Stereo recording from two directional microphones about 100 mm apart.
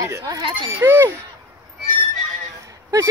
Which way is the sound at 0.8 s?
20° right (ahead or behind).